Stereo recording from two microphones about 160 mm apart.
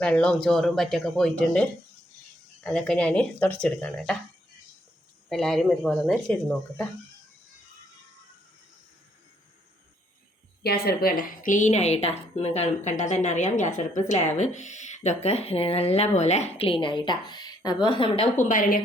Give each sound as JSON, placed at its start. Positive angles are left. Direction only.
{"t": 0.0, "sound": "speech", "side_deg": 5}
{"t": 2.6, "sound": "speech", "side_deg": 5}
{"t": 5.3, "sound": "speech", "side_deg": 5}
{"t": 10.6, "sound": "a woman's voice", "side_deg": 75}
{"t": 18.3, "sound": "a woman's voice", "side_deg": 55}